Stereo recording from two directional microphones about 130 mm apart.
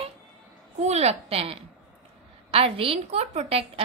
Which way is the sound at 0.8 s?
55° right (ahead or behind).